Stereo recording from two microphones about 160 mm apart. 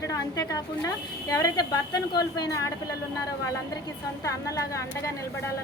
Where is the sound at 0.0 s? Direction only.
20° left (ahead or behind).